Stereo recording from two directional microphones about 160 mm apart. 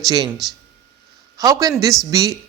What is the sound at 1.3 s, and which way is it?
A man's voice, 20° right (ahead or behind).